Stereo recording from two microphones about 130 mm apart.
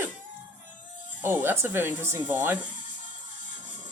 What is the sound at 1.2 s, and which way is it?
Speech, 15° right (ahead or behind).